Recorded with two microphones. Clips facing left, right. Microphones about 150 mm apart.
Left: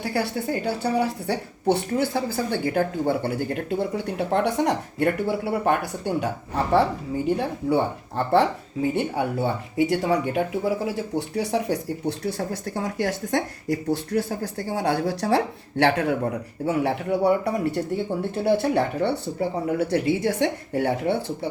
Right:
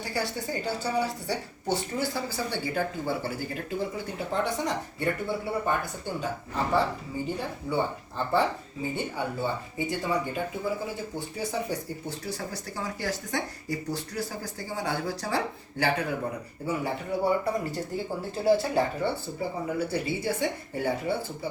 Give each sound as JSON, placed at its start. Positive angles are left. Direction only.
{"t": 0.0, "sound": "speech", "side_deg": 60}
{"t": 15.8, "sound": "speech", "side_deg": 75}